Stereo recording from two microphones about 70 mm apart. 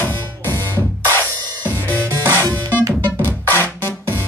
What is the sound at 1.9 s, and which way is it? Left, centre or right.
Music, left.